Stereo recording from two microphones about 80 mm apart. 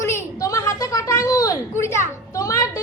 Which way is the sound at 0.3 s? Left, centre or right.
Left.